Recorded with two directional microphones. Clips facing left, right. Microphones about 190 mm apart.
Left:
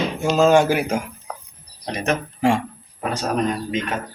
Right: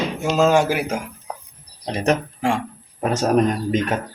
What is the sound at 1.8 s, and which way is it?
Speech, 30° right (ahead or behind).